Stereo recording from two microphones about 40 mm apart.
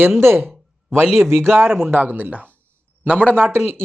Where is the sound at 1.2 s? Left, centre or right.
Right.